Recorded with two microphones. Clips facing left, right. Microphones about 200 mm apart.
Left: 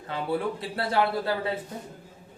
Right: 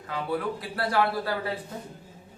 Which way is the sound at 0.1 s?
25° left (ahead or behind).